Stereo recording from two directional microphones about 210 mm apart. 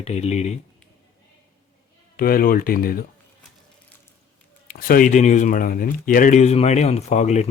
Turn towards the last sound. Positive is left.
turn(degrees=35)  # may be behind; listen again after turning